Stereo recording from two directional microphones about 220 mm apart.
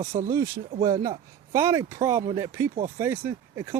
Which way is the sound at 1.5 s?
15° right (ahead or behind).